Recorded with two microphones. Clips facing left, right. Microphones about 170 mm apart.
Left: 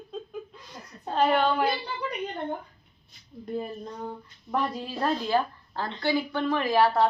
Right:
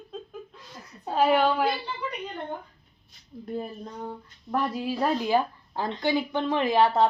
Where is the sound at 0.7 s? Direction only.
5° right (ahead or behind).